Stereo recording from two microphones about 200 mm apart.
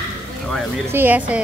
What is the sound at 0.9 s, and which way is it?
Speech, 10° right (ahead or behind).